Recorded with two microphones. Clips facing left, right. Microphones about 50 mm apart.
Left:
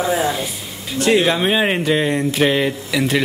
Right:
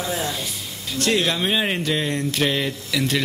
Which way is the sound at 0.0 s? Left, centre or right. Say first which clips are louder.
Left 7 dB; centre.